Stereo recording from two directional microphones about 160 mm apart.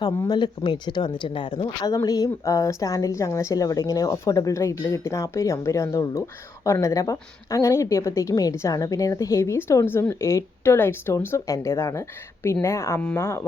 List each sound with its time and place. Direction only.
0.0 s speech: 25° left (ahead or behind)